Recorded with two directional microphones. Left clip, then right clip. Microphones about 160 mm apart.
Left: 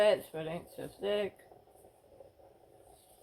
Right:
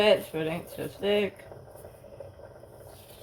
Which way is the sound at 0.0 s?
45° left (ahead or behind).